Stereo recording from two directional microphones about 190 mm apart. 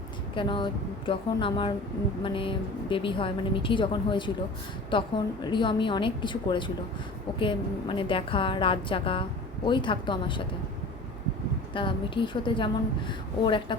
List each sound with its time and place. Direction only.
0.3 s a woman's voice: 25° left (ahead or behind)
11.7 s a woman's voice: 25° left (ahead or behind)